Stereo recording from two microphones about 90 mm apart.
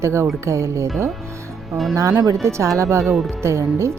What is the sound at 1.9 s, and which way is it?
A woman's voice, 35° right (ahead or behind).